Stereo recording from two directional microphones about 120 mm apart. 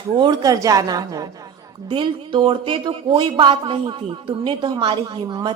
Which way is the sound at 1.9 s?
45° right (ahead or behind).